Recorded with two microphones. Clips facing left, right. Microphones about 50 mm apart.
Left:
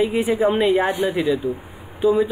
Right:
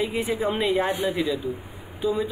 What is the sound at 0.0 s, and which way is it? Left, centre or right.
A man's voice, centre.